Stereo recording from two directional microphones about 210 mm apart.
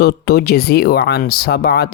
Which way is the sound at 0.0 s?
50° left (ahead or behind).